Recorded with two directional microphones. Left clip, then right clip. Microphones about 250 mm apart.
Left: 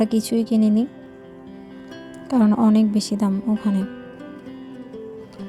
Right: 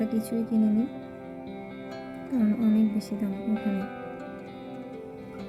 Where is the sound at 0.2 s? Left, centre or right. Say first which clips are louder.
Left 8 dB; left.